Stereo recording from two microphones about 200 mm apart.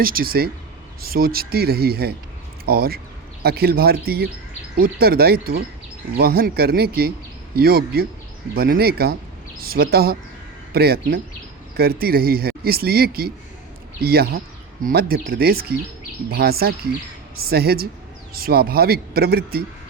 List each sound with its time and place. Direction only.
0.0 s speech: 45° right (ahead or behind)